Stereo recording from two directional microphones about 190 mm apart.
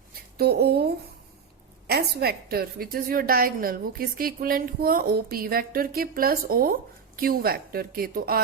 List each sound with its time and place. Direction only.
0.3 s a woman's voice: 55° right (ahead or behind)